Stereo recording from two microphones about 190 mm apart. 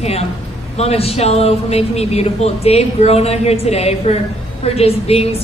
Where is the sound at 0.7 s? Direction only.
35° left (ahead or behind).